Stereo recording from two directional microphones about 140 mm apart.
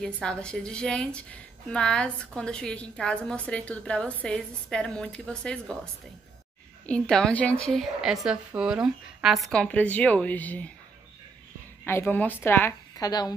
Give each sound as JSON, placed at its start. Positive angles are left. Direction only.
{"t": 0.0, "sound": "a woman's voice", "side_deg": 5}
{"t": 6.9, "sound": "a woman's voice", "side_deg": 5}
{"t": 11.8, "sound": "a woman's voice", "side_deg": 15}
{"t": 12.9, "sound": "a woman's voice", "side_deg": 30}